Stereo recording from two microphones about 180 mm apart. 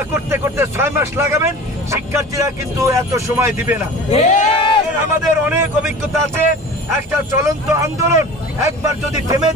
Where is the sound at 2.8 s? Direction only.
15° right (ahead or behind).